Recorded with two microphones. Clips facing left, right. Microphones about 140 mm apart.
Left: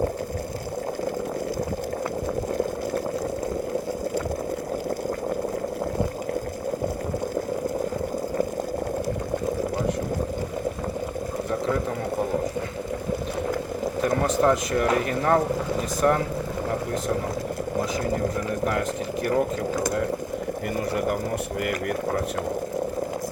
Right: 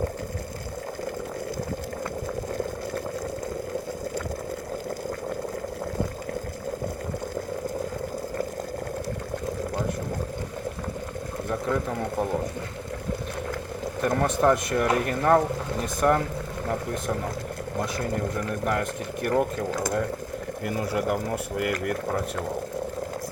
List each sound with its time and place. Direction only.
14.0 s speech: centre (ahead or behind)
18.6 s speech: centre (ahead or behind)